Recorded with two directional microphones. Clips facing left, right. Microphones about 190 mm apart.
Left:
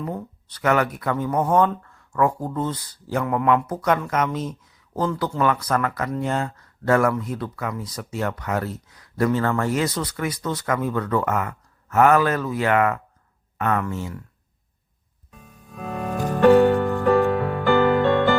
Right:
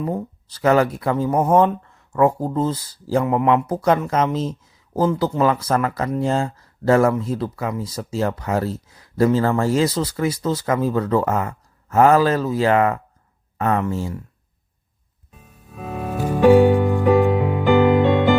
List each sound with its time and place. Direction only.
0.0 s speech: 25° right (ahead or behind)
15.3 s music: 5° right (ahead or behind)